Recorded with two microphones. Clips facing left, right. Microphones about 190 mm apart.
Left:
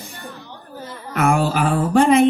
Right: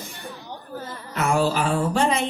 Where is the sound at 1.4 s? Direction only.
55° left (ahead or behind).